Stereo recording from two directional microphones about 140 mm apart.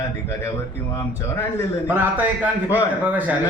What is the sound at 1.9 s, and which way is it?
Speech, 10° right (ahead or behind).